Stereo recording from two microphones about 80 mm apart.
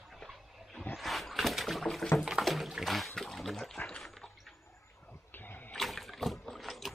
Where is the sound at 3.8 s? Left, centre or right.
Centre.